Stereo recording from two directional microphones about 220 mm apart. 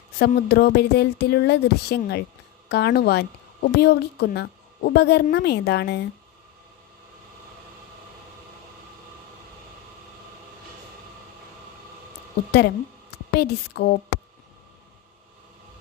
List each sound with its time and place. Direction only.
0.2 s a woman's voice: 45° left (ahead or behind)
12.5 s a woman's voice: 50° left (ahead or behind)